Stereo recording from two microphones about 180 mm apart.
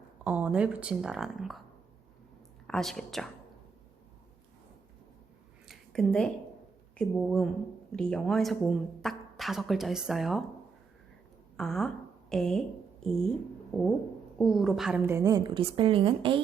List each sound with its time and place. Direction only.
0.3 s speech: 10° right (ahead or behind)
2.6 s a woman's voice: centre (ahead or behind)
5.6 s a sound: centre (ahead or behind)
6.9 s a woman's voice: 5° left (ahead or behind)
11.5 s a woman's voice: 5° left (ahead or behind)
14.3 s a woman's voice: centre (ahead or behind); by 16.4 s 30° right (ahead or behind)